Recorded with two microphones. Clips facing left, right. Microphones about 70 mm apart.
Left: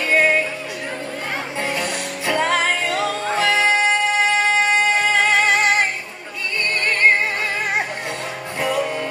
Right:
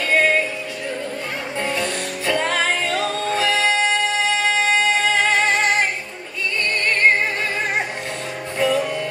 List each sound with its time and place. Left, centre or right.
0.1 s music: centre
1.6 s music: centre
5.3 s music: centre
8.5 s music: centre